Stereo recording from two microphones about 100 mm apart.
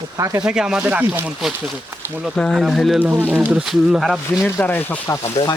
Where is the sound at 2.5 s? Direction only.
Centre (ahead or behind).